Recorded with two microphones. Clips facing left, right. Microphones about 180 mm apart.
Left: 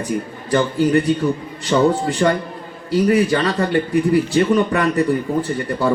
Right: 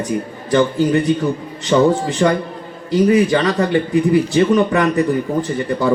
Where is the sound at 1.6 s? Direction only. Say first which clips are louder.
Right 2 dB; 20° right (ahead or behind).